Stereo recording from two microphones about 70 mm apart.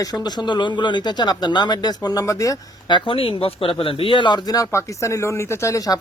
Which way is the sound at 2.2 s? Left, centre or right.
Left.